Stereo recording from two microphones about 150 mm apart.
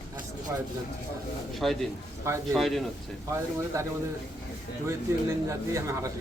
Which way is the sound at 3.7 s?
20° right (ahead or behind).